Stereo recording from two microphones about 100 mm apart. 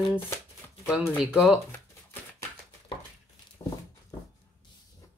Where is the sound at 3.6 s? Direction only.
45° left (ahead or behind).